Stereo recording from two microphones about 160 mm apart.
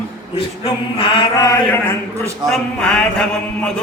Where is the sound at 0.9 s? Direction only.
35° left (ahead or behind).